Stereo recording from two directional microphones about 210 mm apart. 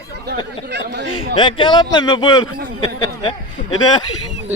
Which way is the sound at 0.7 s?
55° right (ahead or behind).